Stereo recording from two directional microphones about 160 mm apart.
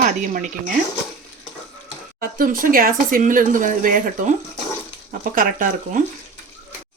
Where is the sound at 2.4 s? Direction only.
60° right (ahead or behind).